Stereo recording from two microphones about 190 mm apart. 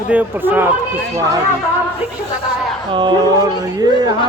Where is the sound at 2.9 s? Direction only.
20° right (ahead or behind).